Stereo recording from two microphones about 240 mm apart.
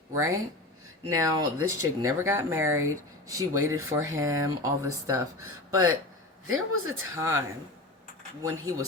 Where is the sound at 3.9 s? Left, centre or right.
Centre.